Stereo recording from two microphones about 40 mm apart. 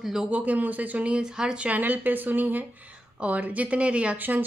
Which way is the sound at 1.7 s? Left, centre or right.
Right.